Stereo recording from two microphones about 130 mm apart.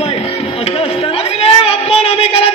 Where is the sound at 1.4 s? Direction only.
50° left (ahead or behind).